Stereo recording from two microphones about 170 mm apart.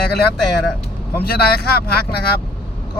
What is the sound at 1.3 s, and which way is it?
Speech, 65° left (ahead or behind).